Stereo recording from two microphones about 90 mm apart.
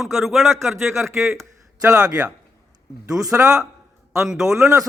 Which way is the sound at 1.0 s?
30° right (ahead or behind).